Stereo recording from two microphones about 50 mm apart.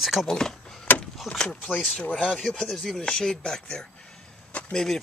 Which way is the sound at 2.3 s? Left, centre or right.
Centre.